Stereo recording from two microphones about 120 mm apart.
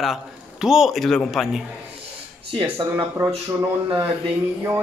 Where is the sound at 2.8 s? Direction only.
25° right (ahead or behind).